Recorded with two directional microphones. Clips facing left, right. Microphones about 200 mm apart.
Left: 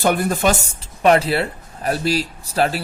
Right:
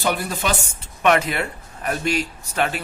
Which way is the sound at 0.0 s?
50° left (ahead or behind).